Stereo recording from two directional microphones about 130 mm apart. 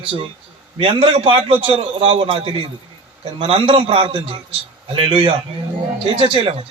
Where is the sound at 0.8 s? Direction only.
45° right (ahead or behind).